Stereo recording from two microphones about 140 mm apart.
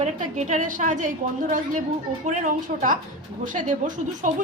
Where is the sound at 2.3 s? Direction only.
65° right (ahead or behind).